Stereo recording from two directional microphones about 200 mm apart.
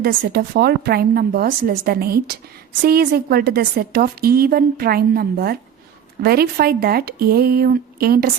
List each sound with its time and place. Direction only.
0.0 s a woman's voice: 50° right (ahead or behind)